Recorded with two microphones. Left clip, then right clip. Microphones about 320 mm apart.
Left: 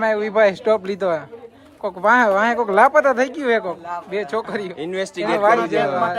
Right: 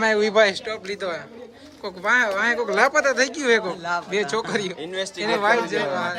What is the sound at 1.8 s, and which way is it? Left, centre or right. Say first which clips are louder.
Speech: left 5 dB; centre.